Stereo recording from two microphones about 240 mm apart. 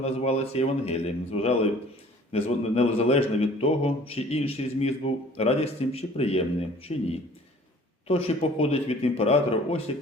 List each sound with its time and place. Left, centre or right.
0.0 s speech: left